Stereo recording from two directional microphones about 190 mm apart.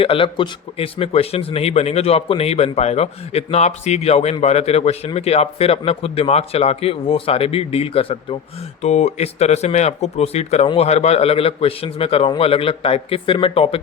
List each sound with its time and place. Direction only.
0.0 s speech: 30° left (ahead or behind)